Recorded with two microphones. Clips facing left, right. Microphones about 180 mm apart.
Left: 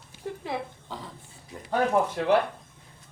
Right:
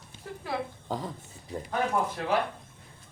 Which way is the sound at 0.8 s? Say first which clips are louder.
Right 6 dB; 45° right (ahead or behind).